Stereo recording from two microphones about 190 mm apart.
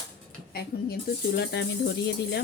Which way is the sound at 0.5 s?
55° left (ahead or behind).